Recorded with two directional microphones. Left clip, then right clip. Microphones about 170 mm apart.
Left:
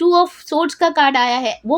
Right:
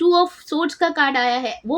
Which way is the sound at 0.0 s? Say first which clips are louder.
Left 2 dB; 35° left (ahead or behind).